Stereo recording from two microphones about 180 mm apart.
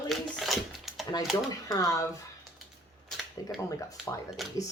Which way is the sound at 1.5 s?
20° left (ahead or behind).